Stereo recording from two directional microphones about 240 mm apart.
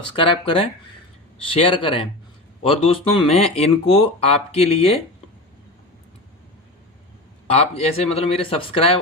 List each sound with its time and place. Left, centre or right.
0.2 s speech: left
7.4 s speech: left